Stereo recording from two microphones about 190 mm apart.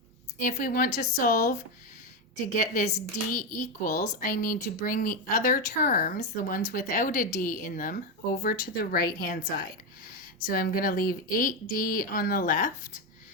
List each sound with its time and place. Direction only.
0.4 s speech: 50° left (ahead or behind)